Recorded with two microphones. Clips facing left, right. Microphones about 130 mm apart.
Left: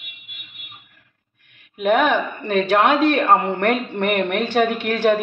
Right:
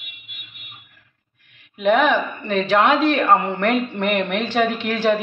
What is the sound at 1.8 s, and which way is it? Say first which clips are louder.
A woman's voice: even; 50° left (ahead or behind).